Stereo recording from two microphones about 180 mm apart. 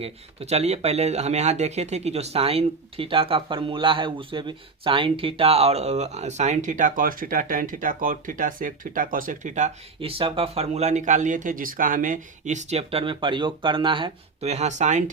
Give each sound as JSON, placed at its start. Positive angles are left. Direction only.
{"t": 0.0, "sound": "speech", "side_deg": -35}